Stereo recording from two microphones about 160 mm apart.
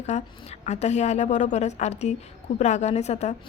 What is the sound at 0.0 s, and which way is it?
A woman's voice, 45° left (ahead or behind).